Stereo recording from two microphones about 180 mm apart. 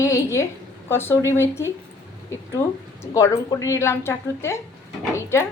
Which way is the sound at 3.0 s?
20° left (ahead or behind).